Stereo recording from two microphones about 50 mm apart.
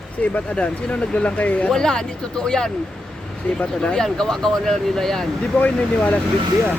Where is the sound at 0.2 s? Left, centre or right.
Left.